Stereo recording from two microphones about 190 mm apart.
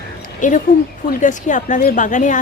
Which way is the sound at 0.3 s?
40° left (ahead or behind).